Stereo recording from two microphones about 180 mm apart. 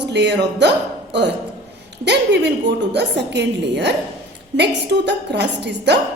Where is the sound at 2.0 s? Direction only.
75° right (ahead or behind).